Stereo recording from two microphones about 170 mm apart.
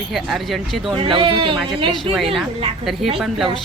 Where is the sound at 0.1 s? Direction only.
Centre (ahead or behind).